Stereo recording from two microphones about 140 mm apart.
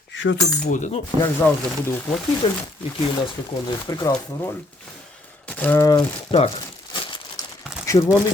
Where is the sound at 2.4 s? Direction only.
40° left (ahead or behind).